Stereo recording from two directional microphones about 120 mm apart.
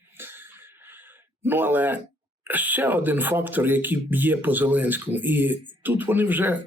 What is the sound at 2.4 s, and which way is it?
Speech, 15° right (ahead or behind).